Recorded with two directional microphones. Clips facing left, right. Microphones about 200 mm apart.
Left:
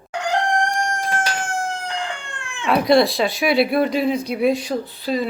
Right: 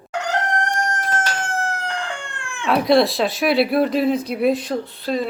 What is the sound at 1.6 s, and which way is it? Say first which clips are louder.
Crowing: right 1 dB; 15° left (ahead or behind).